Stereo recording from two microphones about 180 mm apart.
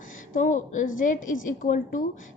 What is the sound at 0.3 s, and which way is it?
A woman's voice, 45° left (ahead or behind).